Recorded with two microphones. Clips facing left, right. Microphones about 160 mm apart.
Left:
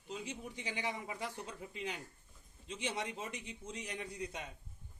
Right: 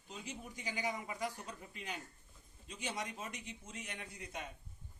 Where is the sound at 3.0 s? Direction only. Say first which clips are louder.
Left 2 dB; 25° left (ahead or behind).